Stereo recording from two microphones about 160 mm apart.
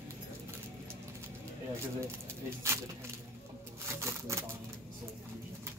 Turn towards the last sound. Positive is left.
turn(degrees=-15)  # may be behind; listen again after turning